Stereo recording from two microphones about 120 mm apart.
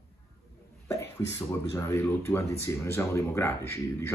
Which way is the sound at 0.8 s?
20° left (ahead or behind).